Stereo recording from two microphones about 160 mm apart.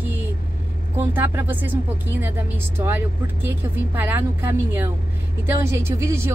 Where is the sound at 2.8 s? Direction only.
15° right (ahead or behind).